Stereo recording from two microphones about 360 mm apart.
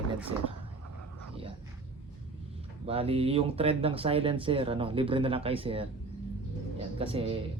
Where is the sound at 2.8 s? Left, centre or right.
Centre.